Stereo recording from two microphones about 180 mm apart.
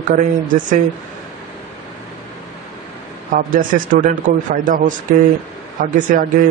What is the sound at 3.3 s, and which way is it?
Speech, 50° right (ahead or behind).